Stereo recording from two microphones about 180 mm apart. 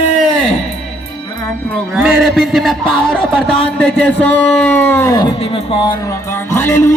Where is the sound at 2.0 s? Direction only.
Centre (ahead or behind); by 5.3 s 20° left (ahead or behind).